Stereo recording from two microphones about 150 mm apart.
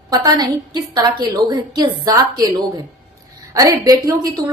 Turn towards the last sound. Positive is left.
turn(degrees=-25)  # may be behind; listen again after turning